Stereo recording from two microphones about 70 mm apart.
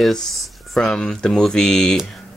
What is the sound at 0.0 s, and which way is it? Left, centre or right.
Speech, centre.